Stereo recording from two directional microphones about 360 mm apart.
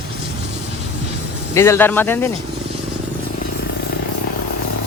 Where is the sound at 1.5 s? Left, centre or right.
Centre.